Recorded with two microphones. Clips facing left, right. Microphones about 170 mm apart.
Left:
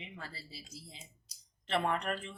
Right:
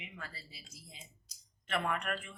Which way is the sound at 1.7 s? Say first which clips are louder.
Left 3 dB; 30° left (ahead or behind).